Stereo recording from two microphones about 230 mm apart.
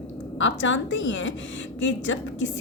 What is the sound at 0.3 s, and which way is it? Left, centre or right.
Speech, left.